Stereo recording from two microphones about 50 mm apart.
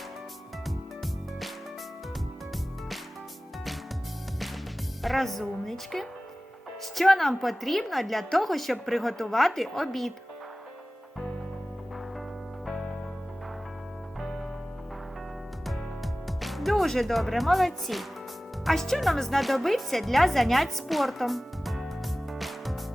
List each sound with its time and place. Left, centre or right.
0.6 s music: centre
5.0 s speech: centre
14.2 s music: centre
16.2 s music: centre
18.6 s speech: centre
22.3 s music: centre